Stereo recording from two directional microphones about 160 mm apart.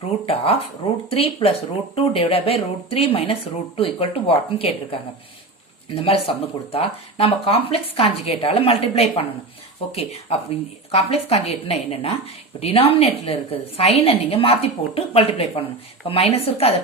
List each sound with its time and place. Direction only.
0.3 s a woman's voice: 40° left (ahead or behind)